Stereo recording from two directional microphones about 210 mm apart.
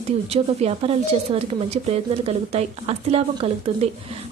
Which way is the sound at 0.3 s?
30° right (ahead or behind).